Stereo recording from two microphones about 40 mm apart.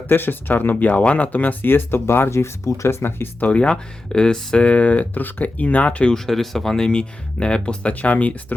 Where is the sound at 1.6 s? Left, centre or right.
Left.